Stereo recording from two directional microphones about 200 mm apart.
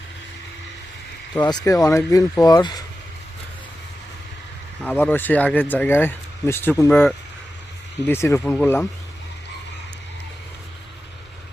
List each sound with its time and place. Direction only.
1.4 s speech: 20° left (ahead or behind)
4.8 s speech: 5° left (ahead or behind)